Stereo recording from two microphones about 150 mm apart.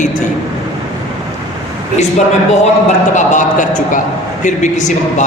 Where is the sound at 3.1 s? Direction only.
55° left (ahead or behind).